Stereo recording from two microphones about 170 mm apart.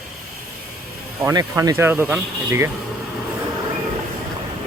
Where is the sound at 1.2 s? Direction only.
20° right (ahead or behind).